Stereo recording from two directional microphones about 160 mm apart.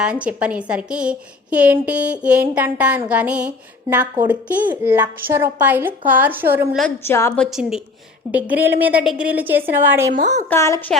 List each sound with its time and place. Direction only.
0.0 s a woman's voice: 5° right (ahead or behind)
7.0 s speech: 15° left (ahead or behind)
7.3 s a woman's voice: 5° right (ahead or behind)
10.2 s speech: 50° right (ahead or behind)
10.5 s speech: 15° left (ahead or behind)